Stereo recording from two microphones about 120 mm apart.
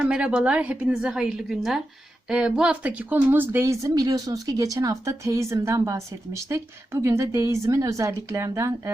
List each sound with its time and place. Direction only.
0.0 s a woman's voice: 10° right (ahead or behind)